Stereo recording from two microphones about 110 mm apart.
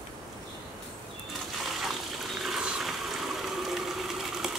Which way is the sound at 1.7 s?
Centre (ahead or behind).